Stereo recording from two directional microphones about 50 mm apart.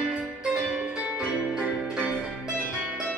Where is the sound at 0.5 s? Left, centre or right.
Right.